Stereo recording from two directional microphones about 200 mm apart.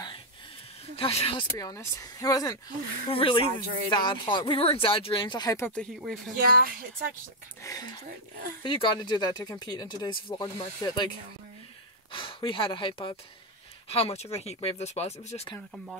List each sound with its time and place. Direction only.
0.9 s speech: 30° left (ahead or behind)
1.6 s speech: 15° left (ahead or behind)
3.6 s speech: 40° right (ahead or behind)
3.9 s speech: 25° left (ahead or behind)
5.8 s speech: centre (ahead or behind)
6.4 s speech: 45° right (ahead or behind)
7.6 s speech: 20° left (ahead or behind)
12.1 s speech: 25° left (ahead or behind)
15.7 s speech: centre (ahead or behind)